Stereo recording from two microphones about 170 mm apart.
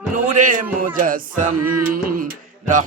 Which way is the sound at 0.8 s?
55° right (ahead or behind).